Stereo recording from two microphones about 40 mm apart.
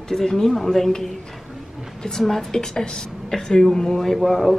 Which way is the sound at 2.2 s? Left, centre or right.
Centre.